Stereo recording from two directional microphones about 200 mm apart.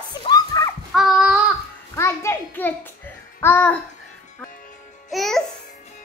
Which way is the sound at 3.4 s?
10° left (ahead or behind).